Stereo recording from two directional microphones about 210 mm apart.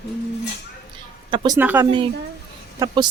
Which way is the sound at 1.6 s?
10° right (ahead or behind).